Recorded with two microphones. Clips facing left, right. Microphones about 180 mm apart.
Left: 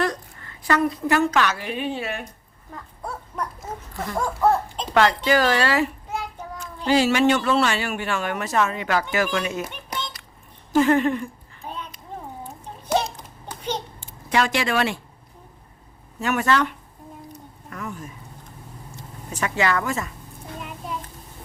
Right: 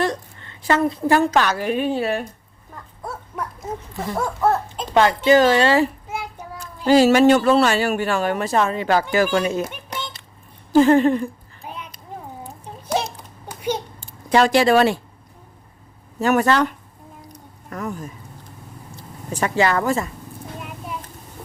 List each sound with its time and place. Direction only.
0.0 s a woman's voice: 25° right (ahead or behind)
3.0 s dog: centre (ahead or behind)
3.9 s speech: 20° right (ahead or behind)
6.1 s child singing: 10° right (ahead or behind)
6.8 s speech: 40° right (ahead or behind)
10.7 s speech: 35° right (ahead or behind)
11.6 s a sound: 10° right (ahead or behind)
13.5 s a sound: 10° right (ahead or behind)
14.0 s speech: 35° right (ahead or behind)
16.2 s speech: 35° right (ahead or behind)
17.3 s a sound: 40° right (ahead or behind)
18.9 s speech: 35° right (ahead or behind)